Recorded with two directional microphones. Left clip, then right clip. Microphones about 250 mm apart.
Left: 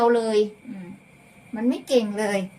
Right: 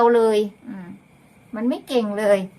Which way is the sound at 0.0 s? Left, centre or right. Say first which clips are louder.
Right 4 dB; centre.